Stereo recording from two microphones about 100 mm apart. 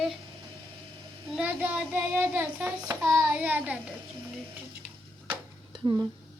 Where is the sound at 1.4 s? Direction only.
15° right (ahead or behind).